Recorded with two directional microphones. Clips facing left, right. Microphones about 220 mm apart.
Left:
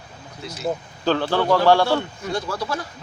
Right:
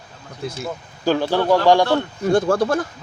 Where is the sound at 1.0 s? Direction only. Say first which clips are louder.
Right 3 dB; 10° right (ahead or behind).